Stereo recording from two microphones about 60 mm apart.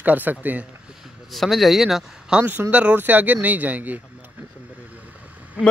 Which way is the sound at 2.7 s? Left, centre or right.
Right.